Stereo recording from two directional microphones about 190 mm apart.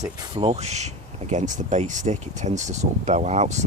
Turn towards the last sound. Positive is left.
turn(degrees=-35)  # may be behind; listen again after turning